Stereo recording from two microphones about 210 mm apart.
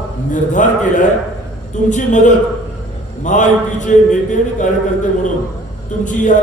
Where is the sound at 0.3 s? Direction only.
35° left (ahead or behind).